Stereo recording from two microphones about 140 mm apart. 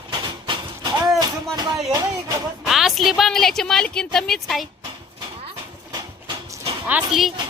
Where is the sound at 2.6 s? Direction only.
Centre (ahead or behind).